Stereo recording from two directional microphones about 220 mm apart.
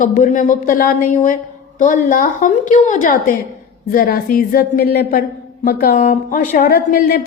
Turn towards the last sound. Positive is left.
turn(degrees=40)  # may be behind; listen again after turning